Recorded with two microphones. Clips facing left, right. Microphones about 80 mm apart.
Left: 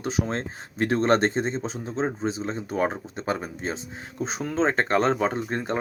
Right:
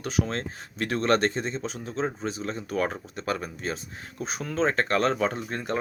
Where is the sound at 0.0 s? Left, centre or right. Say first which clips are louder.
Left 1 dB; left.